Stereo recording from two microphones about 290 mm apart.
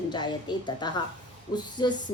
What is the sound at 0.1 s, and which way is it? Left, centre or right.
A woman's voice, centre.